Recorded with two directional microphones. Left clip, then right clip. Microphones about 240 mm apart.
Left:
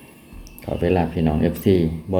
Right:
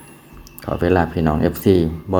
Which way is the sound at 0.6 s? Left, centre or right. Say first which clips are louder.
Right 3 dB; centre.